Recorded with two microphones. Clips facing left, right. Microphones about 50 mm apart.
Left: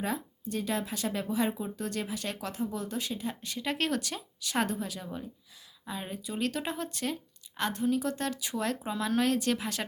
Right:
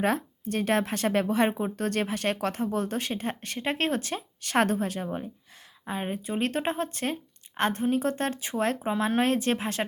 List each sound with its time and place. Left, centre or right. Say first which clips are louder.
0.0 s speech: right 7 dB; right